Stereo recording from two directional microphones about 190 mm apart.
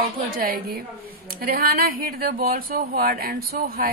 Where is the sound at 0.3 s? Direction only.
50° right (ahead or behind).